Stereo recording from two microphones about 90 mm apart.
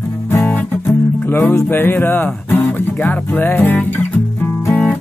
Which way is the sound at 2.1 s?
20° left (ahead or behind).